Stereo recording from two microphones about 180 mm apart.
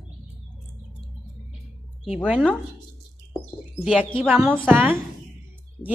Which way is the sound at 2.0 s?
5° right (ahead or behind).